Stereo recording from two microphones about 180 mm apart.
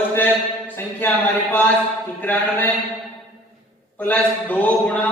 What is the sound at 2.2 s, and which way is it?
Speech, 10° left (ahead or behind).